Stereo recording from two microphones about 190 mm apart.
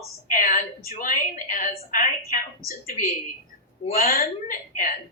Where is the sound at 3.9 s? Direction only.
50° left (ahead or behind).